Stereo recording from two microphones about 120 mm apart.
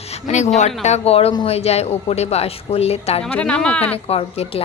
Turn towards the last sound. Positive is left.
turn(degrees=55)  # may be behind; listen again after turning